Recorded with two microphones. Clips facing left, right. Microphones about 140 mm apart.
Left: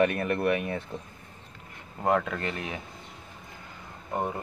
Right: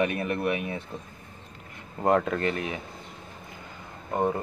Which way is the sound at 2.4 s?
25° left (ahead or behind).